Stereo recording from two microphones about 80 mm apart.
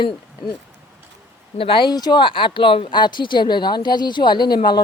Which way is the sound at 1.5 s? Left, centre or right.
Left.